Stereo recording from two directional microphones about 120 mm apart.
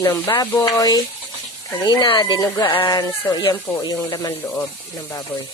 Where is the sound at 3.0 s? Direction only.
30° left (ahead or behind).